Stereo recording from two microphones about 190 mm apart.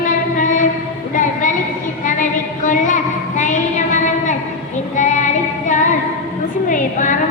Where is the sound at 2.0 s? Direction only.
40° left (ahead or behind).